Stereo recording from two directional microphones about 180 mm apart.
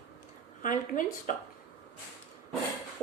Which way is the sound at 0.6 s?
45° left (ahead or behind).